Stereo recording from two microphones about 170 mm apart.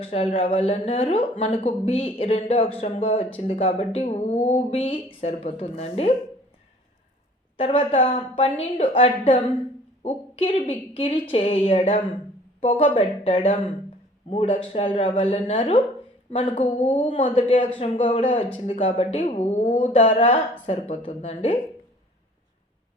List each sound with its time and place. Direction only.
0.0 s a woman's voice: 35° left (ahead or behind)
7.5 s a woman's voice: 35° left (ahead or behind)